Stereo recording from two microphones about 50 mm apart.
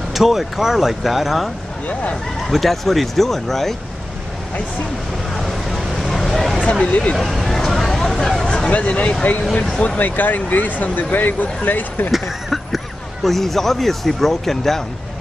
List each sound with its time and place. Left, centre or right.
0.1 s speech: centre
2.5 s speech: centre
5.4 s vehicle: centre
6.6 s speech: left
7.2 s vehicle: centre
8.5 s speech: left
12.1 s speech: centre